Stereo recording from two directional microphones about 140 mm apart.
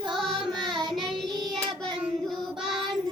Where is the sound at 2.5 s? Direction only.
Centre (ahead or behind).